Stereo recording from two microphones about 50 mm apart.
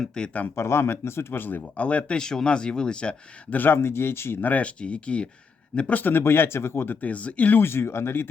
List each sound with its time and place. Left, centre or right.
0.1 s speech: centre
0.5 s speech: left
1.3 s speech: left
1.7 s speech: left
2.1 s speech: centre
3.7 s speech: left
4.4 s speech: left
5.9 s speech: left
6.9 s speech: left
7.5 s speech: left